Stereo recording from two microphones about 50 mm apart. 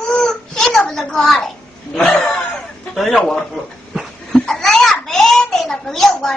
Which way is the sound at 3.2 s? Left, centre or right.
Centre.